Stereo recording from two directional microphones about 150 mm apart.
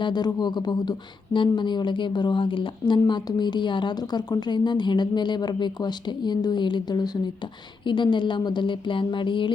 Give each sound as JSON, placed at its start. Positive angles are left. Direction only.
{"t": 0.0, "sound": "speech", "side_deg": 30}